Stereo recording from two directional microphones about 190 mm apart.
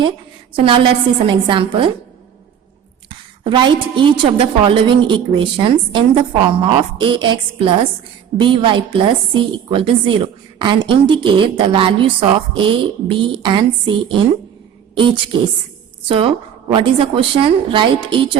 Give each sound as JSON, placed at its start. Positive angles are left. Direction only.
{"t": 0.6, "sound": "a woman's voice", "side_deg": -25}
{"t": 3.1, "sound": "a woman's voice", "side_deg": -25}